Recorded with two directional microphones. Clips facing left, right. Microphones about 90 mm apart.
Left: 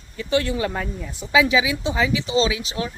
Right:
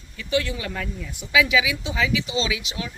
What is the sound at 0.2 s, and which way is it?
A woman's voice, 35° left (ahead or behind).